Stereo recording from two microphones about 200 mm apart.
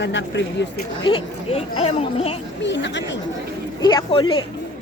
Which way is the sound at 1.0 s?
25° left (ahead or behind).